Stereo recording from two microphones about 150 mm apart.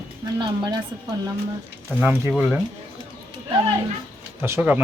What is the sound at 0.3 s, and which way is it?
Speech, 30° right (ahead or behind).